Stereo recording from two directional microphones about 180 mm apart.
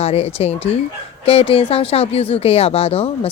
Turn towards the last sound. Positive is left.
turn(degrees=35)  # may be behind; listen again after turning